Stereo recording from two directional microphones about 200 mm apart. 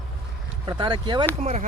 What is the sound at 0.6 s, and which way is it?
Speech, 25° right (ahead or behind).